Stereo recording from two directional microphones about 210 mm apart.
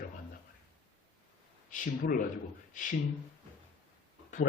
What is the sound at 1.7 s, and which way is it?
Speech, 40° left (ahead or behind).